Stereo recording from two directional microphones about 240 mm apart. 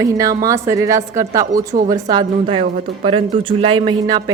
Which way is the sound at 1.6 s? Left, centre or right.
Right.